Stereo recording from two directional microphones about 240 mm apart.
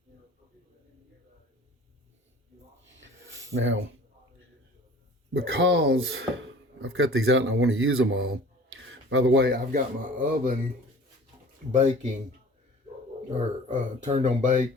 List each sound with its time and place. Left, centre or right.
3.5 s speech: right
5.3 s speech: right
13.3 s speech: right